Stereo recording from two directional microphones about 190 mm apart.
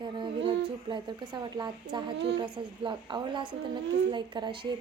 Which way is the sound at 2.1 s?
65° right (ahead or behind).